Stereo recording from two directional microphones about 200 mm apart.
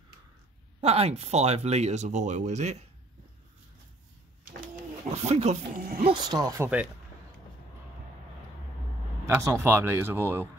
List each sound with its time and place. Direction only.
0.7 s speech: 30° right (ahead or behind)
5.1 s speech: 35° right (ahead or behind)
6.0 s speech: 20° right (ahead or behind)
9.2 s speech: 15° right (ahead or behind)